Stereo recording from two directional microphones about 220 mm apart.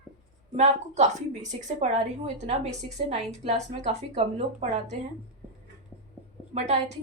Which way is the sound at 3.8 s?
30° right (ahead or behind).